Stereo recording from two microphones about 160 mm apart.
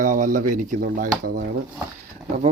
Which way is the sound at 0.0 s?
55° right (ahead or behind).